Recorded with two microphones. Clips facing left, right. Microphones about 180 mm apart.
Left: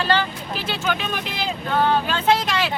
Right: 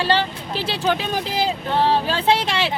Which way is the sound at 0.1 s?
30° right (ahead or behind).